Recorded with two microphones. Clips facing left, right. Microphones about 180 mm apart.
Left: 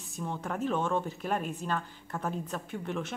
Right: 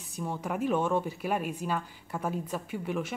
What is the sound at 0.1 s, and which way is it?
Speech, 10° right (ahead or behind).